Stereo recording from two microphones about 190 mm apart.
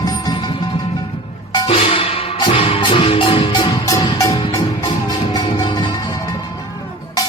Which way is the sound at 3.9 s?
15° left (ahead or behind).